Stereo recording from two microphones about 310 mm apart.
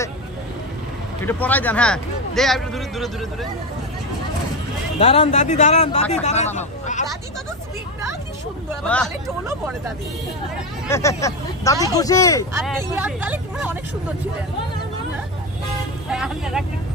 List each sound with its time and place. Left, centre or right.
1.2 s speech: centre
4.9 s a man's voice: centre
8.8 s speech: centre
9.5 s speech: centre
10.9 s speech: centre
12.6 s speech: centre
16.1 s speech: centre